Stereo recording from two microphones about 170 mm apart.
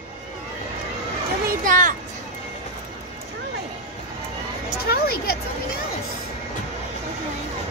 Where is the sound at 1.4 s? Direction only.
50° right (ahead or behind).